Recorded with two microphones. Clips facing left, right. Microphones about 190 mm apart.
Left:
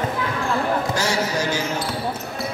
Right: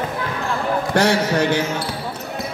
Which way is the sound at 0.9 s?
60° right (ahead or behind).